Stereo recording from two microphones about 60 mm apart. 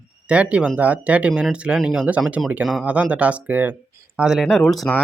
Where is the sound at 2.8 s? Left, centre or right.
Right.